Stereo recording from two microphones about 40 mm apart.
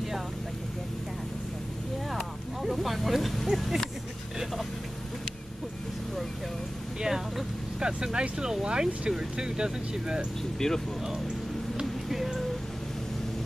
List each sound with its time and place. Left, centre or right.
2.0 s a sound: centre
7.0 s vehicle: centre
7.8 s speech: right
10.6 s speech: centre
11.8 s music: centre